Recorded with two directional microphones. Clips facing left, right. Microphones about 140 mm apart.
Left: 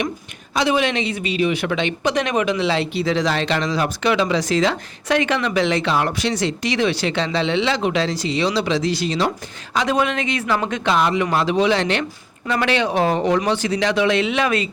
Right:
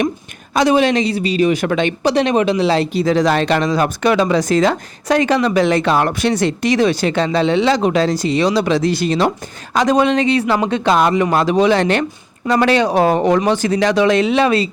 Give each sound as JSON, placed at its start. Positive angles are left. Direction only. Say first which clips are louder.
{"t": 0.5, "sound": "speech", "louder": "right 6 dB", "side_deg": -40}
{"t": 2.1, "sound": "speech", "louder": "right 6 dB", "side_deg": -30}
{"t": 9.7, "sound": "speech", "louder": "right 6 dB", "side_deg": -40}